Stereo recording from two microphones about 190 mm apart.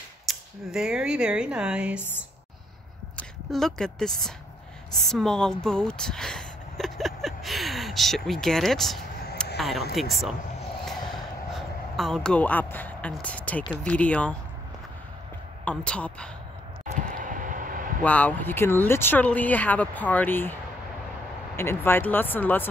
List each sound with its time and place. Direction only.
0.3 s speech: 5° right (ahead or behind)
3.2 s a woman's voice: centre (ahead or behind)
9.6 s a sound: centre (ahead or behind)
11.5 s speech: centre (ahead or behind)
15.6 s speech: 5° left (ahead or behind)
16.8 s a sound: 45° right (ahead or behind)
18.0 s speech: 10° left (ahead or behind)
21.5 s speech: 10° left (ahead or behind)